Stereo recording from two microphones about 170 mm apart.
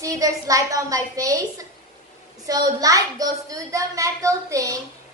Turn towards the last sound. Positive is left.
turn(degrees=-20)  # may be behind; listen again after turning